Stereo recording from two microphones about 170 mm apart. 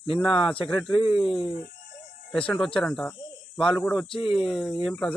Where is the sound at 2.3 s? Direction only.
5° left (ahead or behind).